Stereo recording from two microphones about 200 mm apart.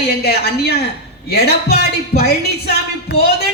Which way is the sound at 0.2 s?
55° left (ahead or behind).